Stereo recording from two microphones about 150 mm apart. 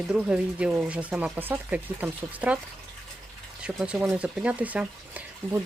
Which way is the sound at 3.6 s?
5° right (ahead or behind).